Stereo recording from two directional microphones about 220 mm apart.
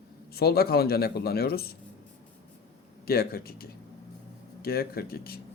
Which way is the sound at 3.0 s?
45° left (ahead or behind).